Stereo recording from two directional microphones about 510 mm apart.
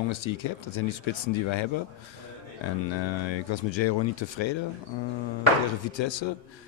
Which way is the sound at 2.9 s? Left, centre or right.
Left.